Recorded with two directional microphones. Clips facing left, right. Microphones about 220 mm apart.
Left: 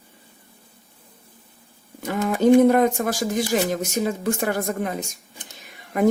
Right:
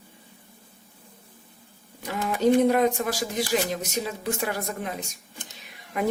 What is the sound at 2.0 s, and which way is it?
Speech, 50° left (ahead or behind).